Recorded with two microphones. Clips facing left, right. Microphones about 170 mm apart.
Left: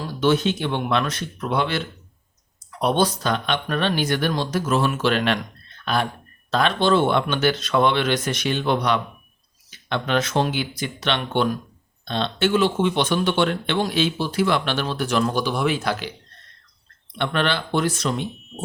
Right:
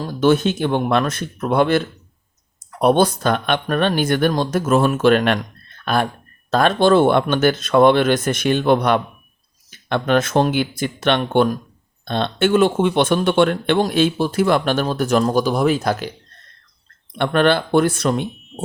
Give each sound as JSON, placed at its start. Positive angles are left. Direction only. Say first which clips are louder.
{"t": 0.1, "sound": "speech", "louder": "right 4 dB", "side_deg": -50}
{"t": 17.2, "sound": "speech", "louder": "right 7 dB", "side_deg": -50}